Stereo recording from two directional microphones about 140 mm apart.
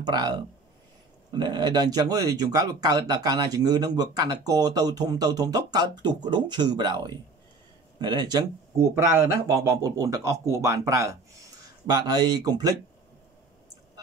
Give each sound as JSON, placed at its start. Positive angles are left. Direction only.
{"t": 0.0, "sound": "speech", "side_deg": -30}
{"t": 1.3, "sound": "speech", "side_deg": -30}
{"t": 8.7, "sound": "speech", "side_deg": -20}